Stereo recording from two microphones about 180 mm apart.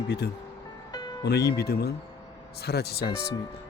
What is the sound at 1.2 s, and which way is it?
Speech, 65° left (ahead or behind).